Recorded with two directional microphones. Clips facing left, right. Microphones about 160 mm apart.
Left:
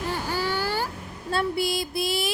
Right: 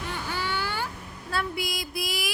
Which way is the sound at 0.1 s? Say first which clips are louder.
Left 3 dB; 40° left (ahead or behind).